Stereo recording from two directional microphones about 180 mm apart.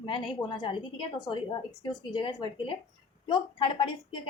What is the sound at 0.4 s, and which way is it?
A woman's voice, 25° left (ahead or behind).